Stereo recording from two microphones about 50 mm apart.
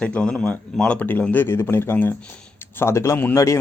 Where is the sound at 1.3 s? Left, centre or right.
Left.